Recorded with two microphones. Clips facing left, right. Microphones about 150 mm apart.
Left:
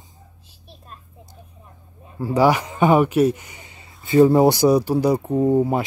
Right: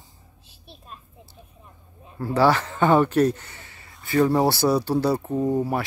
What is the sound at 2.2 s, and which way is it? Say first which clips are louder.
Speech: left 2 dB; 10° left (ahead or behind).